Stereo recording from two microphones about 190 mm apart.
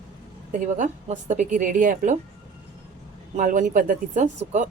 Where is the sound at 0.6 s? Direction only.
40° right (ahead or behind).